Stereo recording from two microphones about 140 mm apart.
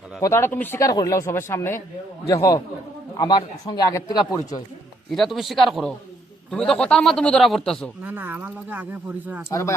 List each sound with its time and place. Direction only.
0.2 s speech: 20° left (ahead or behind)
5.1 s a man's voice: centre (ahead or behind)
8.0 s speech: 15° right (ahead or behind)
9.5 s speech: 20° left (ahead or behind)